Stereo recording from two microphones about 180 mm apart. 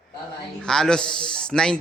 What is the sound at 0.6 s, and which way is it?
A man's voice, 5° left (ahead or behind).